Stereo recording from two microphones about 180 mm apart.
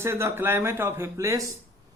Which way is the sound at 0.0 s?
15° right (ahead or behind).